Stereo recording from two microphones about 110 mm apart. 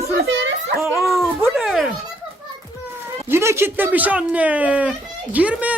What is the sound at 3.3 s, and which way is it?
Speech, 25° right (ahead or behind).